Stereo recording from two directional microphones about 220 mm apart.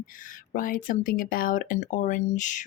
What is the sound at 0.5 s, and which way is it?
Speech, 40° left (ahead or behind).